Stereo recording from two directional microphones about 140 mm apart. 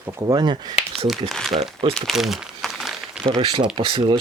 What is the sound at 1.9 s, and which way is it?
Crumpling, centre (ahead or behind).